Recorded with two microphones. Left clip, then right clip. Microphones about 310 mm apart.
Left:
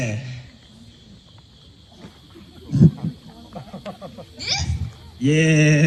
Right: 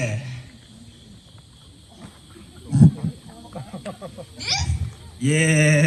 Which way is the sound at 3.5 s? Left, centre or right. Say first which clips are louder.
Even; left.